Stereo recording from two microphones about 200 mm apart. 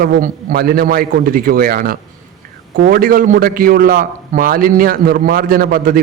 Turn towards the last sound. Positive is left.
turn(degrees=-45)  # may be behind; listen again after turning